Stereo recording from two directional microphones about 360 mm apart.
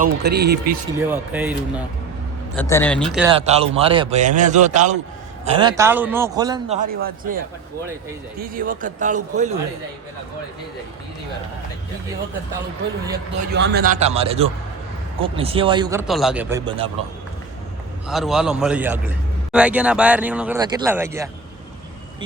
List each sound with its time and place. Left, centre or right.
0.0 s a man's voice: right
0.9 s speech: centre
2.6 s speech: centre
3.3 s a man's voice: centre
13.5 s a man's voice: right
18.1 s speech: centre